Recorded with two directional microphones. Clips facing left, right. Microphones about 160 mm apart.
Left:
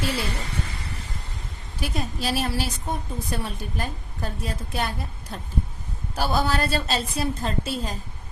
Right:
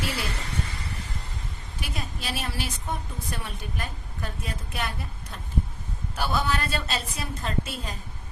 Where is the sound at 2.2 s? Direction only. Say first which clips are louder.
Left 7 dB; 35° left (ahead or behind).